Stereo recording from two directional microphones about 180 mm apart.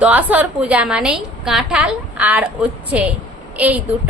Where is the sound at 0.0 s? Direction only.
10° right (ahead or behind).